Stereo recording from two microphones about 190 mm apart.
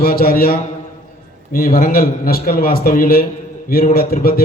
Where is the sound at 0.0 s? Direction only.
50° left (ahead or behind).